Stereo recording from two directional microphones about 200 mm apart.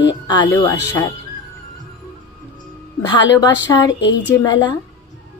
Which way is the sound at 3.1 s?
20° left (ahead or behind).